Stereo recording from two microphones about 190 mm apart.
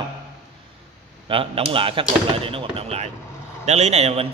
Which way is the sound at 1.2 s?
30° right (ahead or behind).